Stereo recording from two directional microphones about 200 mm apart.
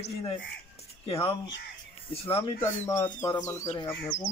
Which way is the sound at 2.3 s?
25° left (ahead or behind).